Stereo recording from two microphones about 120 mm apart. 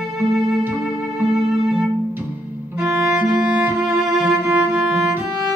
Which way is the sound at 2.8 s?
5° right (ahead or behind).